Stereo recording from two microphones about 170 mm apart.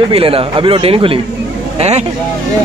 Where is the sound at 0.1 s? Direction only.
35° right (ahead or behind).